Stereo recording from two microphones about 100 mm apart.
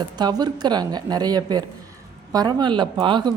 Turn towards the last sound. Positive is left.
turn(degrees=-50)  # may be behind; listen again after turning